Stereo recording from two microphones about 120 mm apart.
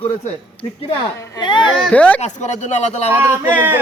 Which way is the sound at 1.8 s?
10° left (ahead or behind).